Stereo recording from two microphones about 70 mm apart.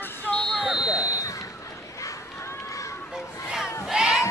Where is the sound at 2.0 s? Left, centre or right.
Left.